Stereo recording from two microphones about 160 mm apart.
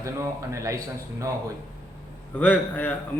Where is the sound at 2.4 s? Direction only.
10° left (ahead or behind).